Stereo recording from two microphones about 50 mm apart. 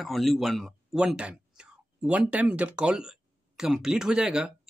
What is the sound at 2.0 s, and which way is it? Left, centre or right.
Speech, right.